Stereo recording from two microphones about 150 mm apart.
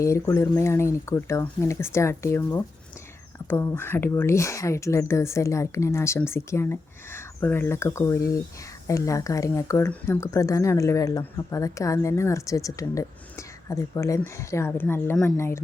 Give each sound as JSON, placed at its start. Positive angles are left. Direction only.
{"t": 0.0, "sound": "a woman's voice", "side_deg": 20}